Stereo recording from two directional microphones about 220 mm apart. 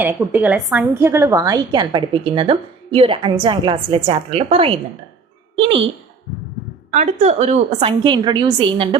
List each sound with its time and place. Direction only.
0.0 s a woman's voice: 10° right (ahead or behind); by 5.8 s 25° right (ahead or behind)
6.9 s a woman's voice: 30° right (ahead or behind)